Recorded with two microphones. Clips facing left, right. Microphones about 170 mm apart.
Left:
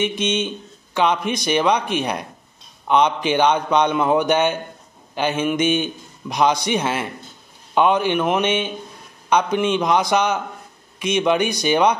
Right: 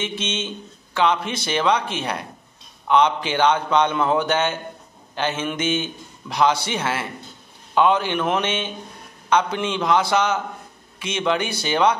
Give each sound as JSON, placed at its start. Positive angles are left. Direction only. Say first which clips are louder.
{"t": 0.0, "sound": "a man's voice", "louder": "left 6 dB", "side_deg": 15}